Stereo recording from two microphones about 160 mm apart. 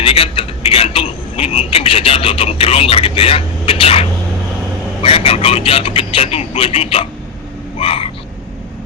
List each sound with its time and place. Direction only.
0.0 s a sound: 35° left (ahead or behind)
5.0 s speech: 35° left (ahead or behind)
7.8 s vehicle: 35° left (ahead or behind)